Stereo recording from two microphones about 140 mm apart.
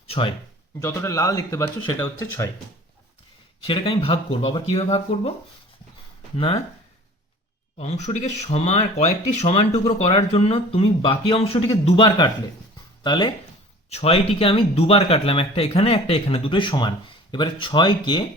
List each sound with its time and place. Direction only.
0.1 s speech: 40° left (ahead or behind)
0.8 s speech: 20° left (ahead or behind)
3.6 s speech: 40° left (ahead or behind)
6.3 s speech: 40° left (ahead or behind)
7.8 s speech: 55° left (ahead or behind); by 13.3 s 35° left (ahead or behind)
13.9 s speech: 45° left (ahead or behind)